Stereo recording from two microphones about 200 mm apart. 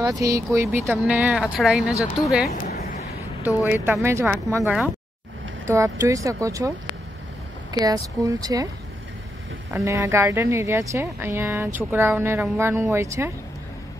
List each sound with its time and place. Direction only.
0.0 s speech: 15° right (ahead or behind)
3.4 s speech: 10° right (ahead or behind)
7.8 s speech: 15° right (ahead or behind)
9.7 s speech: 15° right (ahead or behind)